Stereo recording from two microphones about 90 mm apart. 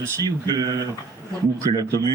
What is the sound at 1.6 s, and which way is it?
Speech, 40° right (ahead or behind).